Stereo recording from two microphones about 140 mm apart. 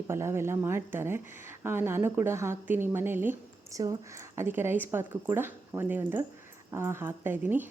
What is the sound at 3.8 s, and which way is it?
Speech, 25° right (ahead or behind).